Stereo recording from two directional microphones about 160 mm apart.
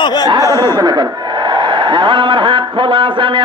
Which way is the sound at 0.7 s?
25° right (ahead or behind).